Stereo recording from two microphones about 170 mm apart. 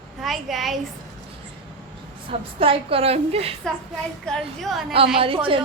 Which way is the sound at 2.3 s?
35° right (ahead or behind).